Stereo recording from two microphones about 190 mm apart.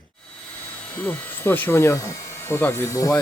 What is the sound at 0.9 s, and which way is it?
A man's voice, 10° left (ahead or behind).